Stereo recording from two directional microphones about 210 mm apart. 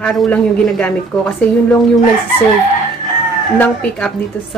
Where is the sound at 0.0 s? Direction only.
5° left (ahead or behind).